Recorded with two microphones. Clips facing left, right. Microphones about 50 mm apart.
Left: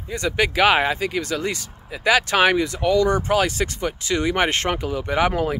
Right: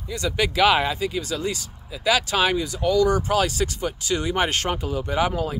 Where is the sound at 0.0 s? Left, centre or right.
Left.